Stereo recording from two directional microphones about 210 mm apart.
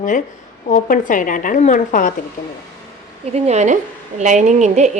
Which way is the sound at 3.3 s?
30° right (ahead or behind).